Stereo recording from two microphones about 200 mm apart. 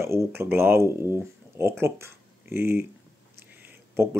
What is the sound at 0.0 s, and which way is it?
Speech, 15° right (ahead or behind).